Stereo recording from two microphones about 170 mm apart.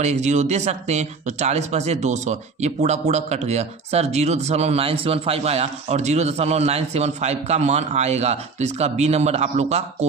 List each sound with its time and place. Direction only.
0.0 s speech: 40° right (ahead or behind)